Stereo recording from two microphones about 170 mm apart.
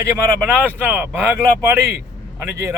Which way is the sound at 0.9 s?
10° right (ahead or behind).